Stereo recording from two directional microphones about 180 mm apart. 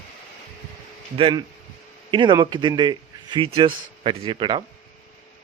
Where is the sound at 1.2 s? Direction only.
30° right (ahead or behind).